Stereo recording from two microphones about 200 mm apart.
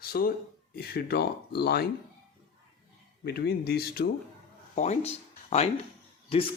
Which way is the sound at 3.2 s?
50° left (ahead or behind).